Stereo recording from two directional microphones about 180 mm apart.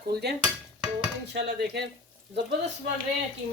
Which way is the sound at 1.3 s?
65° right (ahead or behind).